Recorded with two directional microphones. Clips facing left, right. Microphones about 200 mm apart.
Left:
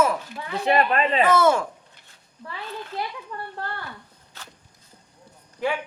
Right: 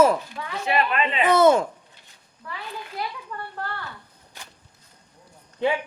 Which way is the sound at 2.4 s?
25° left (ahead or behind).